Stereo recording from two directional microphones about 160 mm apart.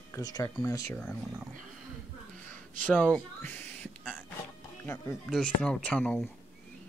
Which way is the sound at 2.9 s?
5° left (ahead or behind).